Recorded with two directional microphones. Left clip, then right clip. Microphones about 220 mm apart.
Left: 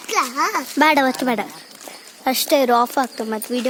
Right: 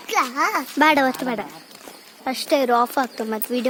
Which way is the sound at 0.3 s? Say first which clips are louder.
Left 1 dB; 15° right (ahead or behind).